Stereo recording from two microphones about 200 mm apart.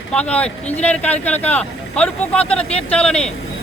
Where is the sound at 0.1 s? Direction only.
5° left (ahead or behind).